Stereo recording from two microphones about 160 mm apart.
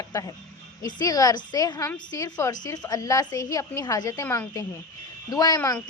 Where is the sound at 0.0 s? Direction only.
20° left (ahead or behind).